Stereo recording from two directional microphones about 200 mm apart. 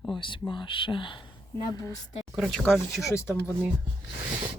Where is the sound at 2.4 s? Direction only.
Centre (ahead or behind).